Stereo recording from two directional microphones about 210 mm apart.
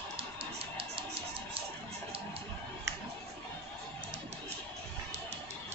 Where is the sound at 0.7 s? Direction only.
25° right (ahead or behind).